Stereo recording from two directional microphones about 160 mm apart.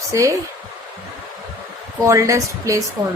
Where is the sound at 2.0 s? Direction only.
20° right (ahead or behind).